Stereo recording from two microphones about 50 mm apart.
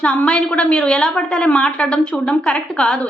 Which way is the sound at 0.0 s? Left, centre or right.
Left.